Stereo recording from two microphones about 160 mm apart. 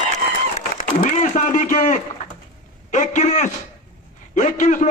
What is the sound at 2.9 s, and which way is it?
A man's voice, 50° left (ahead or behind).